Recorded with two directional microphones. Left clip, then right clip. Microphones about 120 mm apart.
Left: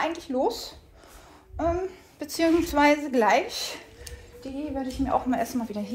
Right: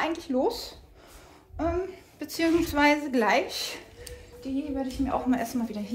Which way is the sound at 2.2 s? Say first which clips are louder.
Left 2 dB; 5° right (ahead or behind).